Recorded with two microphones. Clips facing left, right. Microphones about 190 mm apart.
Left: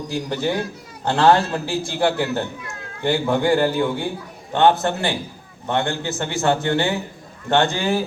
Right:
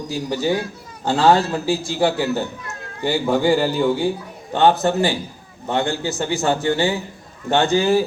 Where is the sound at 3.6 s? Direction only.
55° left (ahead or behind).